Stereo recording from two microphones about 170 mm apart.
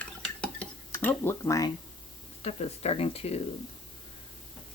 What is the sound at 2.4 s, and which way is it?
Speech, 40° left (ahead or behind).